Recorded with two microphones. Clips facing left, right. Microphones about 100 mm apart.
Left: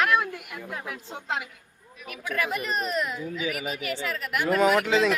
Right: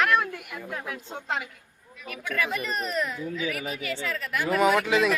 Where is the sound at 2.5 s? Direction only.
20° left (ahead or behind).